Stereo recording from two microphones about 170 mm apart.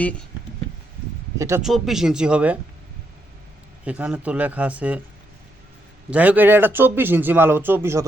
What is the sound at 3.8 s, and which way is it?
Speech, 5° right (ahead or behind).